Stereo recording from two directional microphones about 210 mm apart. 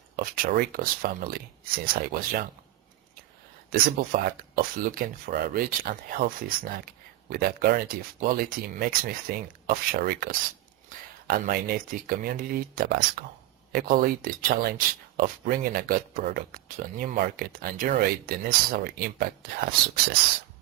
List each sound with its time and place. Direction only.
0.2 s speech: 45° right (ahead or behind)
3.7 s speech: 45° right (ahead or behind)